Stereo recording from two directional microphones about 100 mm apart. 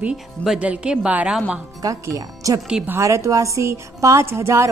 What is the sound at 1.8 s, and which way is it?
A woman's voice, 35° right (ahead or behind).